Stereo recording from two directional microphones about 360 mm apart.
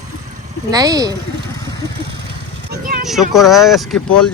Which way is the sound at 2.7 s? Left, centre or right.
Right.